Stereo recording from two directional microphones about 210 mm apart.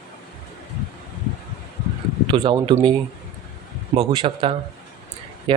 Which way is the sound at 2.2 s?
25° right (ahead or behind).